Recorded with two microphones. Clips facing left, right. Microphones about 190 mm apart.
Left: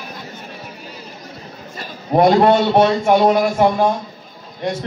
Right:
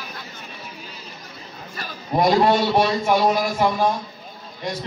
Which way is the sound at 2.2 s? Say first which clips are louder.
Left 5 dB; 55° left (ahead or behind).